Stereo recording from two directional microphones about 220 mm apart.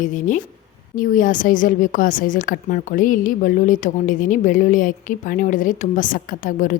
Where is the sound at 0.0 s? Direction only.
35° left (ahead or behind).